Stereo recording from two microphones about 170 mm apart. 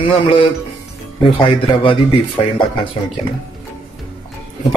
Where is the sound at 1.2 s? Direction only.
30° left (ahead or behind).